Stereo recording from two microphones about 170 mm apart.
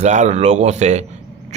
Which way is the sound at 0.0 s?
45° right (ahead or behind).